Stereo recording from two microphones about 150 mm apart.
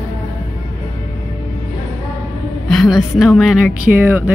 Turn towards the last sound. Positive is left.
turn(degrees=-10)  # may be behind; listen again after turning